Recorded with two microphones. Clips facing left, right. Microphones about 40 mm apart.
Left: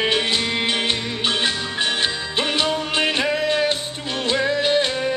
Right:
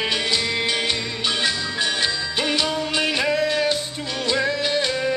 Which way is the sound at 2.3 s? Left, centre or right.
Left.